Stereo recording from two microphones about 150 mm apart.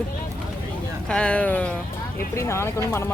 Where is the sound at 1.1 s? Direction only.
5° left (ahead or behind).